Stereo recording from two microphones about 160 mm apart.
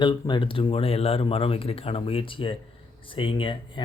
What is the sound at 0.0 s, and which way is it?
Speech, 25° left (ahead or behind).